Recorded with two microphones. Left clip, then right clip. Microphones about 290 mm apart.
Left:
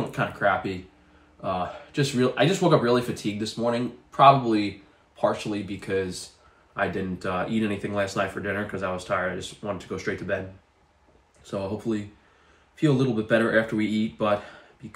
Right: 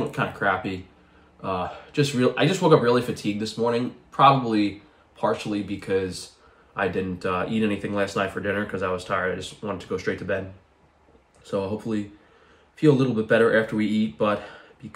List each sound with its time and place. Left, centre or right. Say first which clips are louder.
0.1 s speech: left 3 dB; centre
11.5 s speech: right 2 dB; centre